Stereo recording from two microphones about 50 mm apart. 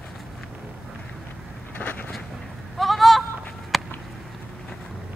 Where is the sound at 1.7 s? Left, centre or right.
Left.